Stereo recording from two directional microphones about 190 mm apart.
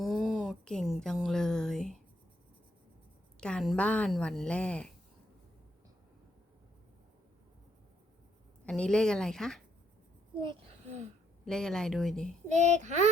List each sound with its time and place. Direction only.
0.0 s a sound: centre (ahead or behind)
3.4 s a woman's voice: centre (ahead or behind)
8.6 s a woman's voice: 5° left (ahead or behind)
10.4 s a sound: 30° right (ahead or behind)
11.4 s a woman's voice: 5° left (ahead or behind)
12.5 s a child's voice: 35° right (ahead or behind)